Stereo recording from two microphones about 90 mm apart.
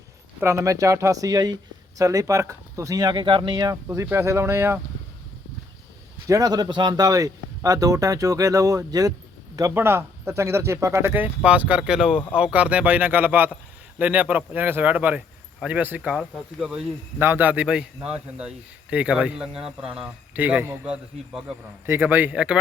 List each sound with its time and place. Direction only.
0.3 s speech: 30° right (ahead or behind); by 3.8 s 50° right (ahead or behind)
3.8 s speech: 25° right (ahead or behind)
6.2 s speech: 40° right (ahead or behind)
9.7 s a man's voice: 25° right (ahead or behind)
17.2 s a man's voice: 25° right (ahead or behind); by 20.1 s 10° right (ahead or behind)
20.3 s speech: 20° right (ahead or behind)
20.8 s a man's voice: 10° right (ahead or behind)
21.8 s speech: 25° right (ahead or behind)